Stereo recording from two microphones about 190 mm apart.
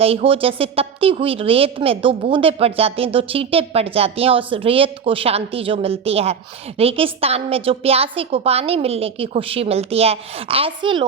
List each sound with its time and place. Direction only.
0.0 s a woman's voice: 30° right (ahead or behind)